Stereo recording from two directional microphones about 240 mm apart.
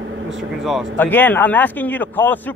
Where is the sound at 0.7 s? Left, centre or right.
Centre.